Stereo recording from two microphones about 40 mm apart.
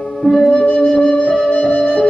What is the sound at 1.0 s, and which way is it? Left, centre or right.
Music, left.